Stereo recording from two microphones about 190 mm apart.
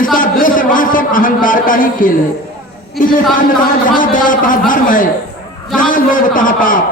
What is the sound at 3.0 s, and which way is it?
A man's voice, 45° left (ahead or behind).